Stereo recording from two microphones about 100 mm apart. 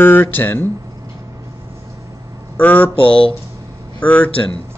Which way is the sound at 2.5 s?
15° left (ahead or behind).